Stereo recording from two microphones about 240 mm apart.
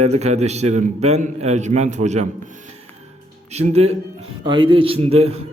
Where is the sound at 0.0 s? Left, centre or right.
Right.